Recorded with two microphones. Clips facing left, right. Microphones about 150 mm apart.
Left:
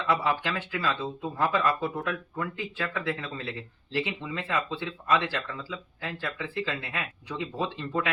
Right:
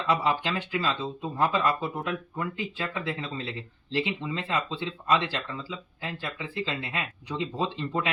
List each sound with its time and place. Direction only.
0.0 s speech: 20° right (ahead or behind)